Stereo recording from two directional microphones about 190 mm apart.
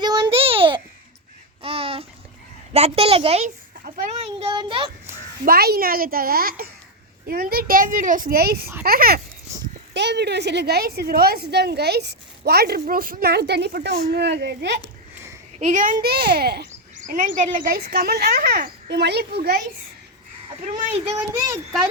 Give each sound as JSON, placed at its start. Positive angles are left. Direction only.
{"t": 0.0, "sound": "a sound", "side_deg": -20}
{"t": 1.6, "sound": "babbling", "side_deg": -30}
{"t": 2.7, "sound": "a woman's voice", "side_deg": -35}
{"t": 3.8, "sound": "a child's voice", "side_deg": -50}
{"t": 4.2, "sound": "a child's voice", "side_deg": -30}
{"t": 5.5, "sound": "a child's voice", "side_deg": -55}
{"t": 9.5, "sound": "a sound", "side_deg": -15}
{"t": 9.9, "sound": "a woman's voice", "side_deg": -65}
{"t": 14.8, "sound": "a sound", "side_deg": -15}
{"t": 15.5, "sound": "a woman's voice", "side_deg": -40}
{"t": 17.1, "sound": "a child's voice", "side_deg": -45}